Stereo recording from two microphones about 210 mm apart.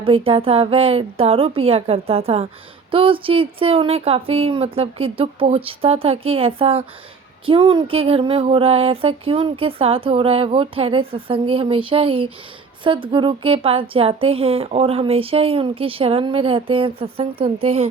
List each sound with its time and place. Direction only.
0.0 s speech: 25° right (ahead or behind)